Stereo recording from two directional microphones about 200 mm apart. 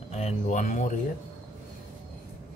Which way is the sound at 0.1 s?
30° left (ahead or behind).